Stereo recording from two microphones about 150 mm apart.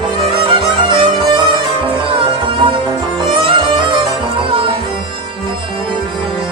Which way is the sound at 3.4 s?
35° right (ahead or behind).